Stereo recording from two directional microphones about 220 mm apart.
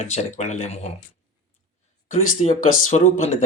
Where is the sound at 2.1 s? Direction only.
35° left (ahead or behind).